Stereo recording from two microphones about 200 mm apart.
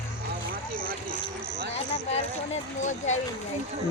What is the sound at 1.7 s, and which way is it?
Speech, 35° left (ahead or behind).